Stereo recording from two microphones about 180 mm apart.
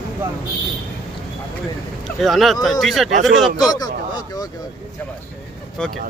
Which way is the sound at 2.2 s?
Centre (ahead or behind).